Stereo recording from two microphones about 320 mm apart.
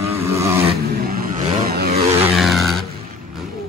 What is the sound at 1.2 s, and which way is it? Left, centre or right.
Vehicle, right.